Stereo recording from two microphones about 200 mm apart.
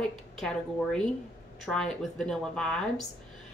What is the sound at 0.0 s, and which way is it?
A woman's voice, centre (ahead or behind).